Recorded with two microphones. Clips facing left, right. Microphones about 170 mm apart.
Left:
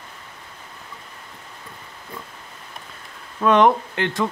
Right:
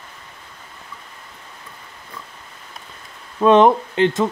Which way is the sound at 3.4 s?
20° right (ahead or behind).